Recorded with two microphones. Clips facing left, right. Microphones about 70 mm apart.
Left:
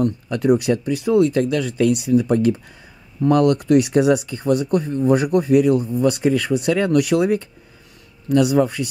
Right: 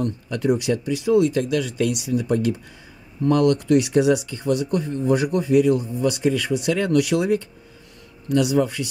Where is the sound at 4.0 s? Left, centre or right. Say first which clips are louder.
Left 2 dB; left.